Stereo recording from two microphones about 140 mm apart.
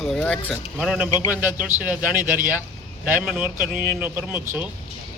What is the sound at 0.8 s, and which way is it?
A man's voice, 5° right (ahead or behind).